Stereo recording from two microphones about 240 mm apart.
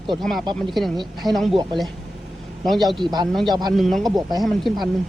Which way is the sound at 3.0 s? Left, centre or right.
Centre.